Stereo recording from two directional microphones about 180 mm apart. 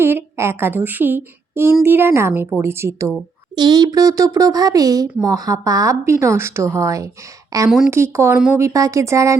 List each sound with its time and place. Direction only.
0.0 s speech: 10° right (ahead or behind)